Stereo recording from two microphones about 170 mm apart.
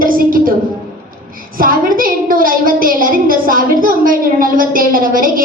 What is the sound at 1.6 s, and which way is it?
A woman's voice, 55° right (ahead or behind).